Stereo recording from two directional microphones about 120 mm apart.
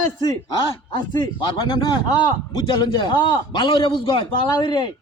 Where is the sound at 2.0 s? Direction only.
40° left (ahead or behind).